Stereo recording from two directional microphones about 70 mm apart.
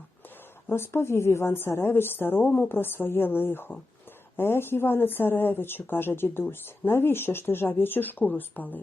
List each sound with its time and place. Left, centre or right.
0.7 s speech: left